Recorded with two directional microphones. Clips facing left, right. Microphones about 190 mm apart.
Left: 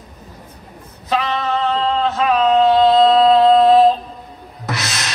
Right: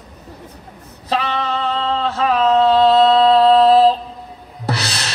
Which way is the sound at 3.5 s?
35° right (ahead or behind).